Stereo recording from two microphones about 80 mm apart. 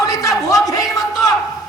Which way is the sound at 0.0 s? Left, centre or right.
Left.